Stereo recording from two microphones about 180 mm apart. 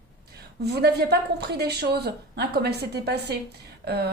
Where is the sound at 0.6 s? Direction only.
65° right (ahead or behind).